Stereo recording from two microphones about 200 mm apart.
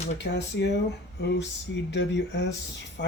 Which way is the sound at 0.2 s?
60° left (ahead or behind).